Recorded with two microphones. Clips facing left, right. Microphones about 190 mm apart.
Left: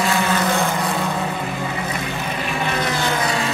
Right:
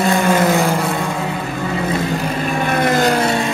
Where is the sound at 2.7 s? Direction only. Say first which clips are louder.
Right 9 dB; 50° right (ahead or behind).